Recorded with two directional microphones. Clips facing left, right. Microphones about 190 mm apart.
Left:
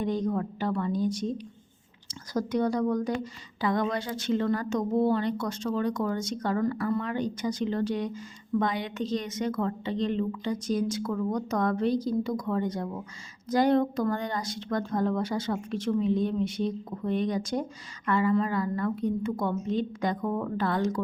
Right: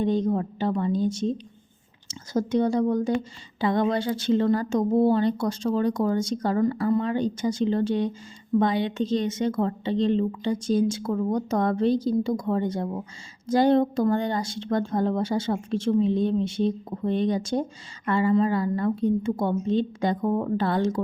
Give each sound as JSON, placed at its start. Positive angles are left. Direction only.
{"t": 0.0, "sound": "speech", "side_deg": -25}